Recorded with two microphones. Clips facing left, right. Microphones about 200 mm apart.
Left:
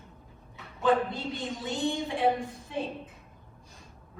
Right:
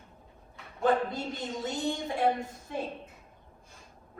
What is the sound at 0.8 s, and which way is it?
A woman's voice, 45° right (ahead or behind).